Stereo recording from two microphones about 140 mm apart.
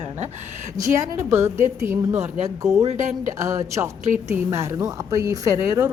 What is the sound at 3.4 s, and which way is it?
Speech, 20° right (ahead or behind).